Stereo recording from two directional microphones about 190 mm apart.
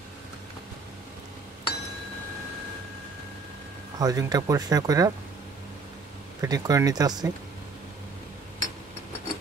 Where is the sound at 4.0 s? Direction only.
20° right (ahead or behind).